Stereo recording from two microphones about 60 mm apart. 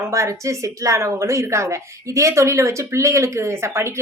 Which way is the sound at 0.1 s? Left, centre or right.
Right.